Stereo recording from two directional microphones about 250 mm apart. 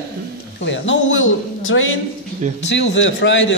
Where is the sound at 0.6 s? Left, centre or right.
Left.